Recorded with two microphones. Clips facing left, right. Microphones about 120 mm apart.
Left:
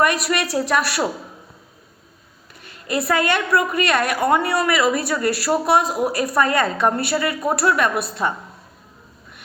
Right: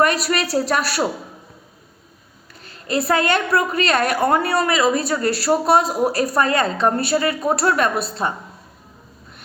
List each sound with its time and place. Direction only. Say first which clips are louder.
0.0 s a sound: right 1 dB; 35° right (ahead or behind)
2.6 s a woman's voice: right 2 dB; 30° right (ahead or behind)
4.5 s speech: right 1 dB; 25° right (ahead or behind)